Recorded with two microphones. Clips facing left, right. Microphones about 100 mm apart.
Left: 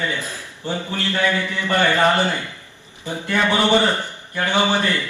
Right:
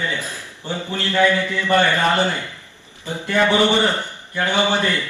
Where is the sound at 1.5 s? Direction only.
15° left (ahead or behind).